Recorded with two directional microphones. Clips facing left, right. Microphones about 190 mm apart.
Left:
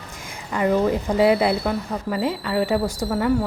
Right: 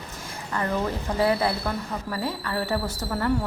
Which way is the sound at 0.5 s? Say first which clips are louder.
Left 7 dB; 15° left (ahead or behind).